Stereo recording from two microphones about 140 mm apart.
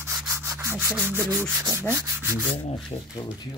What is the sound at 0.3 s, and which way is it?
Sanding, 20° right (ahead or behind).